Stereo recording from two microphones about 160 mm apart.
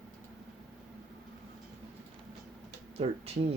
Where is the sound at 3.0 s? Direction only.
40° right (ahead or behind).